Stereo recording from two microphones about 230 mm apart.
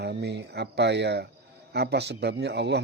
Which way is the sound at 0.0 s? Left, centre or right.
Right.